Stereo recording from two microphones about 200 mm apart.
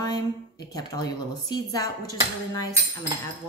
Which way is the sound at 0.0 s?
20° left (ahead or behind).